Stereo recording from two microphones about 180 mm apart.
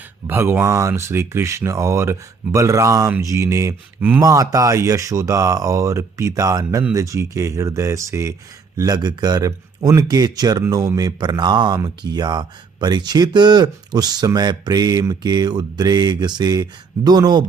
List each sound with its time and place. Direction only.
0.3 s speech: 10° right (ahead or behind)